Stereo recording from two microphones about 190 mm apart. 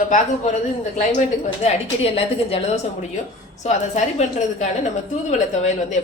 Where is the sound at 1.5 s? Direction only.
30° left (ahead or behind).